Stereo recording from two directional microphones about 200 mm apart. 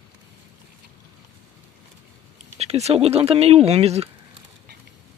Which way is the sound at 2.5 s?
30° right (ahead or behind).